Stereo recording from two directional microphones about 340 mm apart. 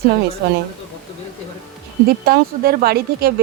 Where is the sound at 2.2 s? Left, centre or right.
Right.